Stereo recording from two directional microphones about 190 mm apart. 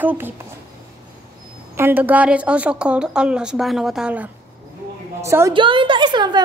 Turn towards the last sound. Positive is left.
turn(degrees=-25)  # may be behind; listen again after turning